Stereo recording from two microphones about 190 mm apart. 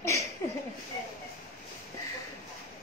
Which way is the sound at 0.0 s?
15° left (ahead or behind).